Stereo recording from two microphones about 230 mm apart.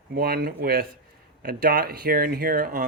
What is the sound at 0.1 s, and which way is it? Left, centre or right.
Speech, right.